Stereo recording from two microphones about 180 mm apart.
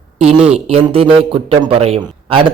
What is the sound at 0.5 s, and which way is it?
A man's voice, 35° right (ahead or behind).